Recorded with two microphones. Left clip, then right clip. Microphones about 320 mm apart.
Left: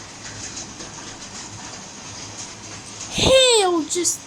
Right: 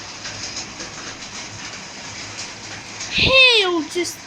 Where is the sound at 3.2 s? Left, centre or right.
Left.